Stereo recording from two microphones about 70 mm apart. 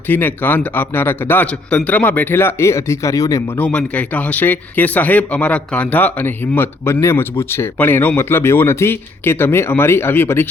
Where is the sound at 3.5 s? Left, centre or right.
Centre.